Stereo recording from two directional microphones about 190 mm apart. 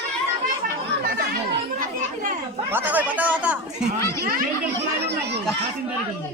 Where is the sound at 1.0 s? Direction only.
55° right (ahead or behind).